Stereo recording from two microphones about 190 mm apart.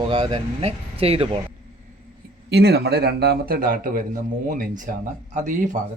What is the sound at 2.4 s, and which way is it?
Speech, 60° right (ahead or behind).